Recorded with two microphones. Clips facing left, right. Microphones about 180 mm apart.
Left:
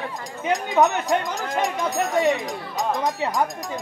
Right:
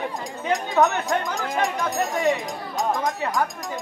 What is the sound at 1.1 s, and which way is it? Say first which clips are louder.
Speech: left 1 dB; centre (ahead or behind).